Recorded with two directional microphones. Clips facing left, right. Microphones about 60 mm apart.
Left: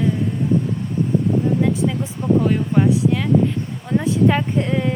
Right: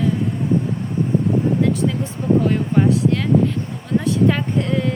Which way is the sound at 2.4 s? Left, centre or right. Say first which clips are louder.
Even; centre.